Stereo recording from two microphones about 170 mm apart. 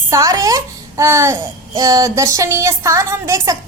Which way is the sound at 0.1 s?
20° right (ahead or behind).